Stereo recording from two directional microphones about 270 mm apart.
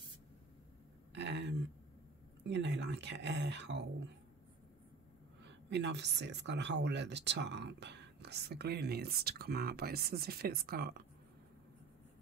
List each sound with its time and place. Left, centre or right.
1.1 s a sound: right
2.4 s a woman's voice: right
5.4 s a woman's voice: right